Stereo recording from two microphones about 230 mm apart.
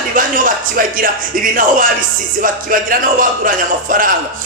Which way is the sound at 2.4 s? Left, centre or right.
Right.